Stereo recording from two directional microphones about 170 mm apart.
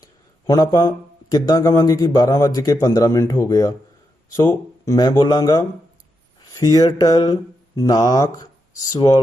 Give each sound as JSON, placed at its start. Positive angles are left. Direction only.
{"t": 0.0, "sound": "speech", "side_deg": 20}